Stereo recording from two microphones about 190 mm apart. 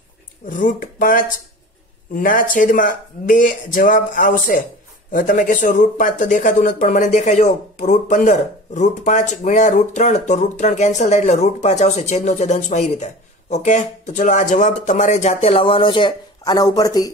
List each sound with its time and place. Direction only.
0.5 s speech: 45° left (ahead or behind); by 17.1 s 20° left (ahead or behind)